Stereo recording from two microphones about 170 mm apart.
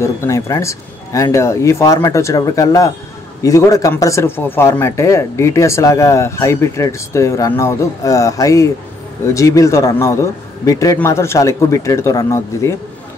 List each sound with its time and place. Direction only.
0.0 s speech: 15° left (ahead or behind)